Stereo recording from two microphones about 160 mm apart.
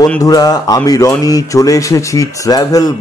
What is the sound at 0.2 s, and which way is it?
Speech, 20° left (ahead or behind).